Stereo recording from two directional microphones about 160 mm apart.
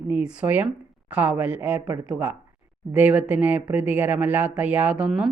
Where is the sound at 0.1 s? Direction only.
5° right (ahead or behind).